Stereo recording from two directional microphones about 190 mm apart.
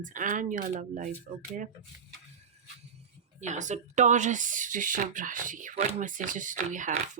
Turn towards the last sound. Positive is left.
turn(degrees=-40)  # may be behind; listen again after turning